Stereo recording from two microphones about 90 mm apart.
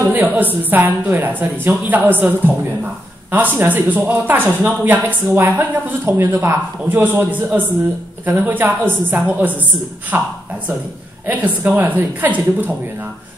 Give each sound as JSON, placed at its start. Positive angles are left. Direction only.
{"t": 0.0, "sound": "speech", "side_deg": -20}